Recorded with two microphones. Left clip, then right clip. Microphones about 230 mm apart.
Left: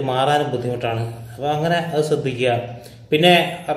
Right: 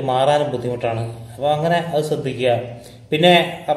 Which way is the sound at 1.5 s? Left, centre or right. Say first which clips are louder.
Right 2 dB; centre.